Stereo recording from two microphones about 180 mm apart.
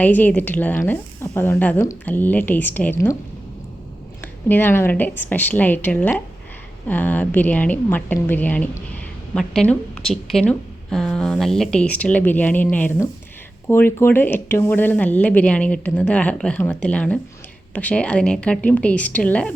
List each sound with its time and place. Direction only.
0.0 s a woman's voice: 10° left (ahead or behind)
4.2 s a woman's voice: 10° left (ahead or behind)